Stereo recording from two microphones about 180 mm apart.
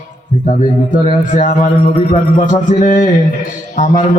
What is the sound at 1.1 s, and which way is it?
A man's voice, 45° left (ahead or behind).